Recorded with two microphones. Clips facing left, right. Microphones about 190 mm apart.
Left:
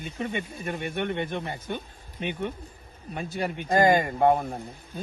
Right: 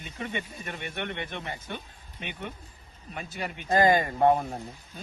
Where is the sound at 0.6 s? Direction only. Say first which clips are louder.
Left 6 dB; 35° left (ahead or behind).